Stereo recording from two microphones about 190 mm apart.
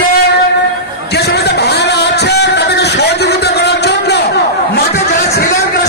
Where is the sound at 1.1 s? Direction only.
60° left (ahead or behind).